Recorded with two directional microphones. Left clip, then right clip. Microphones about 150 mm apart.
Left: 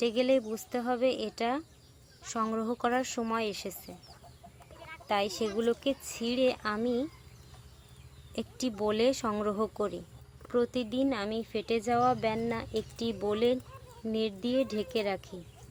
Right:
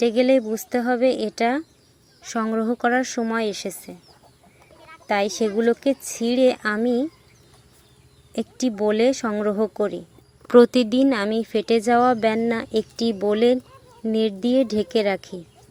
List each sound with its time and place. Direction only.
0.0 s speech: 25° right (ahead or behind)
5.0 s speech: 25° right (ahead or behind)
8.4 s speech: 20° right (ahead or behind)
10.5 s speech: 55° right (ahead or behind); by 15.4 s 35° right (ahead or behind)